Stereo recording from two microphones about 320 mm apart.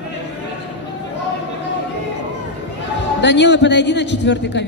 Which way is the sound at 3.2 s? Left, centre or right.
Left.